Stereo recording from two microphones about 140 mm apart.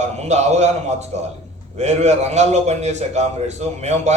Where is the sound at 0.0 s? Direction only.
55° right (ahead or behind).